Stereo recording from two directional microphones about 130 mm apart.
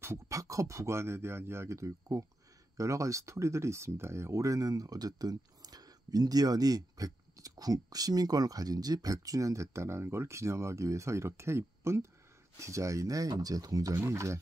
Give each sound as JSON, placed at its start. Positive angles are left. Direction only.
{"t": 0.0, "sound": "speech", "side_deg": -20}